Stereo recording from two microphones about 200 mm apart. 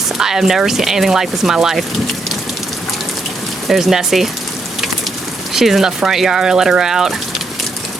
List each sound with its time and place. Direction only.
0.2 s speech: centre (ahead or behind)
3.7 s speech: centre (ahead or behind)
5.5 s speech: centre (ahead or behind)